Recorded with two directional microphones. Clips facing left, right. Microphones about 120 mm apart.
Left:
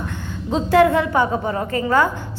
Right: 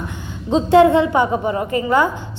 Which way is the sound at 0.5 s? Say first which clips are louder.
Right 3 dB; 25° right (ahead or behind).